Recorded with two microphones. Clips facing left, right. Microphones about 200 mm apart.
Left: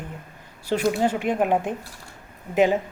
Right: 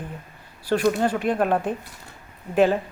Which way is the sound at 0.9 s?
15° left (ahead or behind).